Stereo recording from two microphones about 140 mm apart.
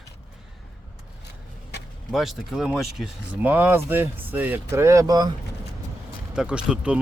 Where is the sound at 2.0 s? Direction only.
Centre (ahead or behind); by 5.3 s 30° right (ahead or behind).